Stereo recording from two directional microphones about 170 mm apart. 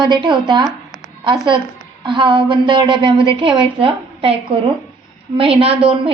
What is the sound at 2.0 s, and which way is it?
A woman's voice, 30° right (ahead or behind).